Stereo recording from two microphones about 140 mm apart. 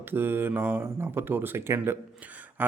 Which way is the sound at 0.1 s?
15° right (ahead or behind).